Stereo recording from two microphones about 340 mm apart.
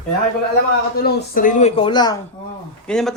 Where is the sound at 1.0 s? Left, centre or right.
Left.